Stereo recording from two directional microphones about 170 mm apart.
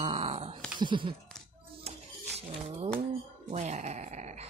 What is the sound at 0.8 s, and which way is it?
Speech, 30° right (ahead or behind).